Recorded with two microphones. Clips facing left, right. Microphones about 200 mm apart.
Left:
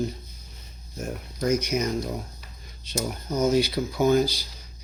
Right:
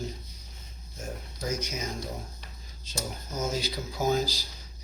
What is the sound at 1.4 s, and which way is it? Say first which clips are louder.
Speech: left 9 dB; 70° left (ahead or behind).